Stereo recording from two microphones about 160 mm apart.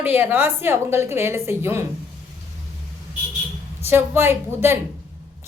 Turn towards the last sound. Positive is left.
turn(degrees=-15)  # may be behind; listen again after turning